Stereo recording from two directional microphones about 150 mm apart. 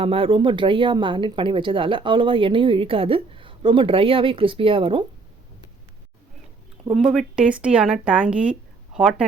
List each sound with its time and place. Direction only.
0.0 s speech: 40° right (ahead or behind)
6.9 s speech: centre (ahead or behind)